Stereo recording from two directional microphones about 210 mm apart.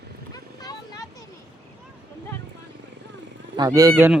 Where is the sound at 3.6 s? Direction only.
20° right (ahead or behind).